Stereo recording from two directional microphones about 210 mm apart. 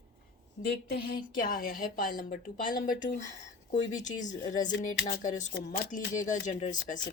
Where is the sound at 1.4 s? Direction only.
40° left (ahead or behind).